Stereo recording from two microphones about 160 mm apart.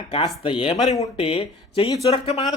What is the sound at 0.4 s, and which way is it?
Speech, 35° left (ahead or behind).